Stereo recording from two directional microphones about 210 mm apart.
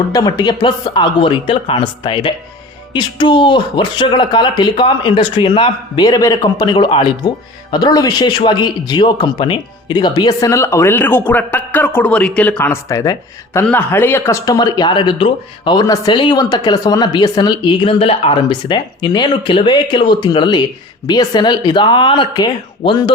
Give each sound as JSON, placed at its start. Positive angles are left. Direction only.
{"t": 0.1, "sound": "a man's voice", "side_deg": 20}